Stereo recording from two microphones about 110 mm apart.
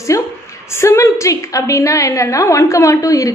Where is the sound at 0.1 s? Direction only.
30° left (ahead or behind).